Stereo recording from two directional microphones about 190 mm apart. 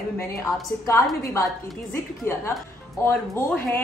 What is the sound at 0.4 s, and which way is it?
A woman's voice, 15° left (ahead or behind).